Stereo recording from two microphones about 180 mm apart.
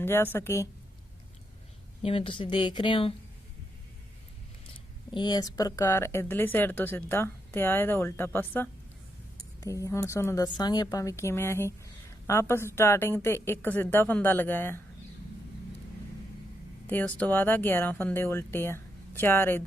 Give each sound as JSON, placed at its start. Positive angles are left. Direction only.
{"t": 0.0, "sound": "speech", "side_deg": 10}
{"t": 2.0, "sound": "speech", "side_deg": 30}
{"t": 4.7, "sound": "speech", "side_deg": 25}
{"t": 16.8, "sound": "speech", "side_deg": 10}